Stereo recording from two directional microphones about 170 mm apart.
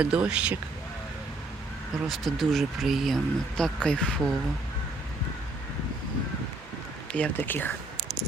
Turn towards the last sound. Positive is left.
turn(degrees=10)  # may be behind; listen again after turning